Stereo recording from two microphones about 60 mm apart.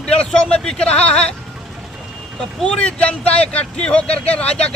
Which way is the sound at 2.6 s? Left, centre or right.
Centre.